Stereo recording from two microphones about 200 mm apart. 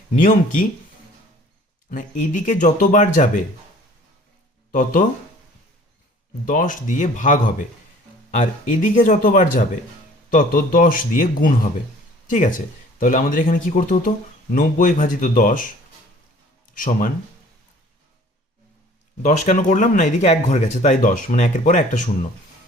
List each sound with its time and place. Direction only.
0.1 s speech: 40° left (ahead or behind)
1.9 s speech: 40° left (ahead or behind)
4.7 s speech: 40° left (ahead or behind)
6.4 s speech: 40° left (ahead or behind)
8.4 s speech: 40° left (ahead or behind)
16.7 s speech: 40° left (ahead or behind)
19.2 s speech: 40° left (ahead or behind)